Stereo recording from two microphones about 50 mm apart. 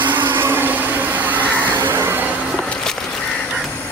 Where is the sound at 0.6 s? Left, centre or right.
Right.